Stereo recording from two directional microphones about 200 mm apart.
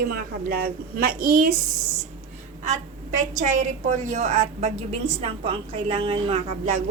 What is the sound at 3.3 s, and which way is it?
A woman's voice, 40° right (ahead or behind).